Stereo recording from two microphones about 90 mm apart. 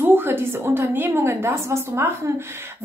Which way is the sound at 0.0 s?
25° right (ahead or behind).